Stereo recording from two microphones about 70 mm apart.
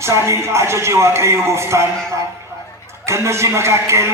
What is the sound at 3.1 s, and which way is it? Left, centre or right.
Speech, right.